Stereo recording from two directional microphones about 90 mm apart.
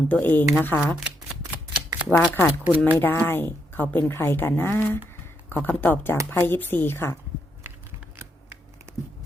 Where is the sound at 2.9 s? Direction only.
20° left (ahead or behind).